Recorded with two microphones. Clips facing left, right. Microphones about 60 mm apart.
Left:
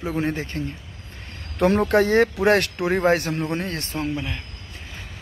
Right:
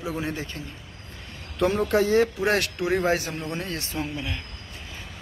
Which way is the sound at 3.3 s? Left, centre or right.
Left.